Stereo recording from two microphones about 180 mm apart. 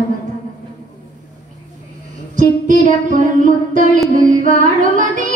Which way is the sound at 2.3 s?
45° right (ahead or behind).